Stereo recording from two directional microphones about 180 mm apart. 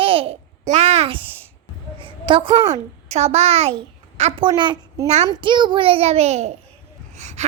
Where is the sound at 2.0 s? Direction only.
30° right (ahead or behind).